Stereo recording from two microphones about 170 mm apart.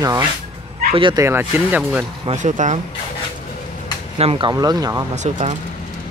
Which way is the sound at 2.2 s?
45° right (ahead or behind).